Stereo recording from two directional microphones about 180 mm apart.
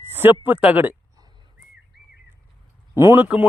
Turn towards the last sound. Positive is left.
turn(degrees=-10)  # may be behind; listen again after turning